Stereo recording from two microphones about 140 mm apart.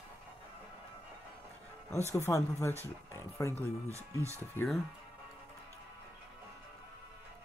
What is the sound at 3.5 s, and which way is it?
Speech, 20° right (ahead or behind).